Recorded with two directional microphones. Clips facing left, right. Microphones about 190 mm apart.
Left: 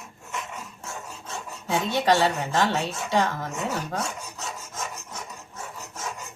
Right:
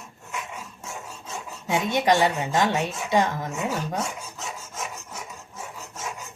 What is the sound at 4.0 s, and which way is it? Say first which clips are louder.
Filing: right 1 dB; 5° right (ahead or behind).